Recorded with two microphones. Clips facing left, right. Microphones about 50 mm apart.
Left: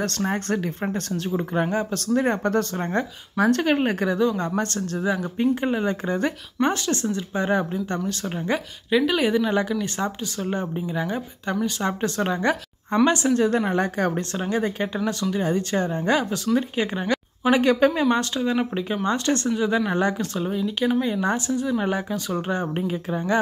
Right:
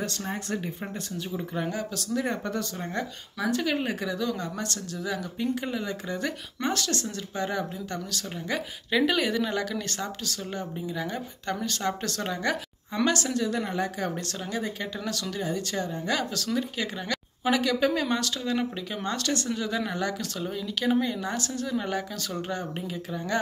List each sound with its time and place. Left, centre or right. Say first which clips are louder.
0.0 s speech: left 7 dB; left
1.7 s speech: left 7 dB; left
8.9 s speech: left 3 dB; centre
9.2 s speech: left 6 dB; centre
10.4 s speech: left 9 dB; left
13.4 s speech: left 7 dB; left
14.3 s speech: left 7 dB; left
16.2 s speech: left 6 dB; left